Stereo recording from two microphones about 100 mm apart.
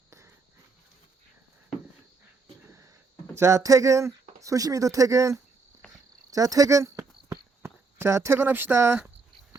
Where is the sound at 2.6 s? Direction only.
30° right (ahead or behind).